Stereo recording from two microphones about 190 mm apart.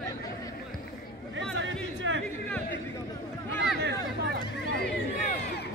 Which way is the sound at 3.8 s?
60° right (ahead or behind).